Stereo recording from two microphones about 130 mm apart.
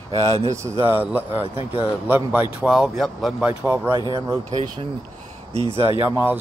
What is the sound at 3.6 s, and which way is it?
Speech, 15° right (ahead or behind).